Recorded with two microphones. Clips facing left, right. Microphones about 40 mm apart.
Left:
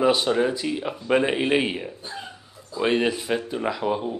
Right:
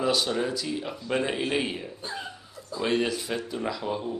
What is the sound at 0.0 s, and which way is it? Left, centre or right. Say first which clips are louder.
A man's voice: left 6 dB; left.